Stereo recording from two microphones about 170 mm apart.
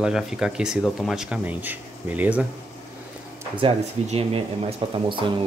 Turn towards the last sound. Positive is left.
turn(degrees=-30)  # may be behind; listen again after turning